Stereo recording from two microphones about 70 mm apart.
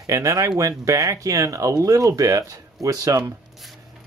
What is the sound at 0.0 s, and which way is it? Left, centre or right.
Speech, right.